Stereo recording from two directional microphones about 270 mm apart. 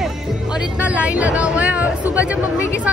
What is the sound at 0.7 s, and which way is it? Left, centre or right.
Speech, centre.